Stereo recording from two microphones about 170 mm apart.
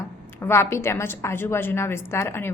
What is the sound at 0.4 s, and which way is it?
A woman's voice, 15° left (ahead or behind).